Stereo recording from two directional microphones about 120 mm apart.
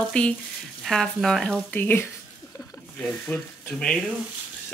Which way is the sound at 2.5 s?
30° left (ahead or behind).